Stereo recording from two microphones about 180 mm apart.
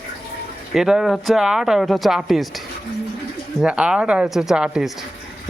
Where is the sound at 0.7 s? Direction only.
5° right (ahead or behind).